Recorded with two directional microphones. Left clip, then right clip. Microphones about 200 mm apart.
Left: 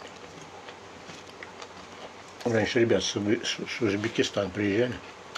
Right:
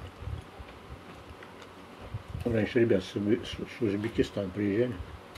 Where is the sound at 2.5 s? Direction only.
15° right (ahead or behind).